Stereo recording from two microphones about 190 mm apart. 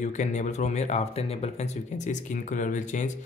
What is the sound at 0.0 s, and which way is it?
Speech, 40° left (ahead or behind).